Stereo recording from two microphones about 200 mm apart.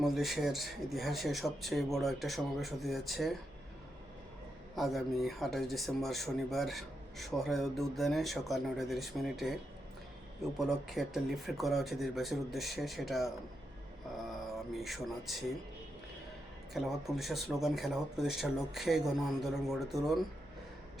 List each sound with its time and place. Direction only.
0.0 s speech: centre (ahead or behind)
4.7 s speech: centre (ahead or behind)
10.6 s speech: centre (ahead or behind)
16.7 s speech: centre (ahead or behind)